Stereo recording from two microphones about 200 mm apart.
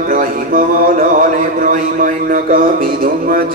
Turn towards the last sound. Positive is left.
turn(degrees=-45)  # may be behind; listen again after turning